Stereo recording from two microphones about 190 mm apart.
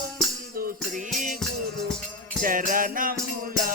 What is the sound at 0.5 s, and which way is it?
Music, 50° right (ahead or behind).